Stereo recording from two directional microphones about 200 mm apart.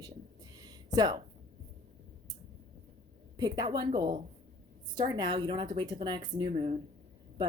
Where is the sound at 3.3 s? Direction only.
20° right (ahead or behind).